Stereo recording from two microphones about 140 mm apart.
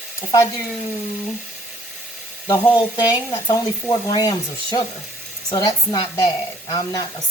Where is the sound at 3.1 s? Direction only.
25° left (ahead or behind).